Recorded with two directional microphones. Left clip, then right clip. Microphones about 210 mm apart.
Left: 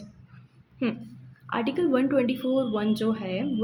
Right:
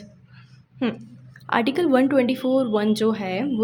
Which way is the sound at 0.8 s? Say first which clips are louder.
Right 3 dB; 30° right (ahead or behind).